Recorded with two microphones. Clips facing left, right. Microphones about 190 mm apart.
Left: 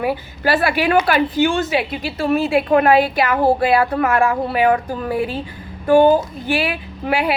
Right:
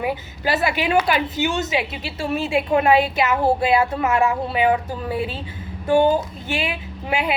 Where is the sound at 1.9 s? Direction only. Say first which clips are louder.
Left 6 dB; 55° left (ahead or behind).